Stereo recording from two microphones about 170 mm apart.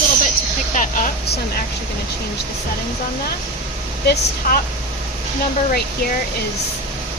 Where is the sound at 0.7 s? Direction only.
50° left (ahead or behind).